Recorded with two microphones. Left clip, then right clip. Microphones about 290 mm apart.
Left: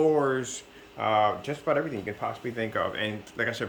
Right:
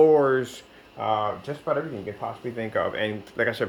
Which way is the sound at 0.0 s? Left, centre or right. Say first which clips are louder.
Right 6 dB; centre.